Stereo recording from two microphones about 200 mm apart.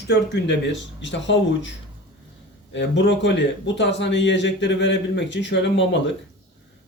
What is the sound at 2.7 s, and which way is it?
A man's voice, 60° left (ahead or behind).